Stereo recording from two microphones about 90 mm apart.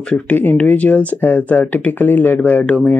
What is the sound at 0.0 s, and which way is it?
Speech, 10° left (ahead or behind).